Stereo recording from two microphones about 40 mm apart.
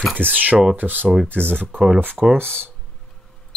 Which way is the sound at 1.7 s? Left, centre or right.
Centre.